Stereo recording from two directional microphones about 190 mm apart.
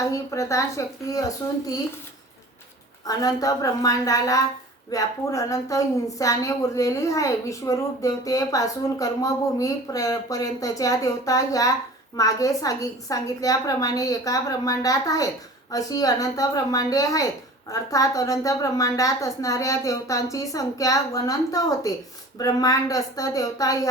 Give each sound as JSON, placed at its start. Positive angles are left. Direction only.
{"t": 0.0, "sound": "a woman's voice", "side_deg": 15}
{"t": 3.1, "sound": "a woman's voice", "side_deg": 20}